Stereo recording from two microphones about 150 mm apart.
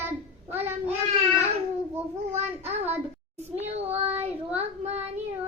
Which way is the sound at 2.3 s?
45° right (ahead or behind).